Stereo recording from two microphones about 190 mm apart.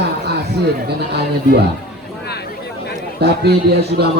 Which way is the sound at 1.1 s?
60° right (ahead or behind).